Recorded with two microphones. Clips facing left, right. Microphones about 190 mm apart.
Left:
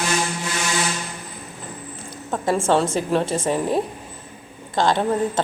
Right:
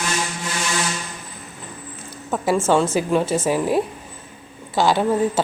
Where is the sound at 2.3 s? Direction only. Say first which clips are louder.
Right 2 dB; 5° right (ahead or behind).